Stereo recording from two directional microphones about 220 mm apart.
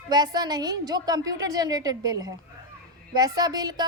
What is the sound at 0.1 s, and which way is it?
Speech, 20° right (ahead or behind).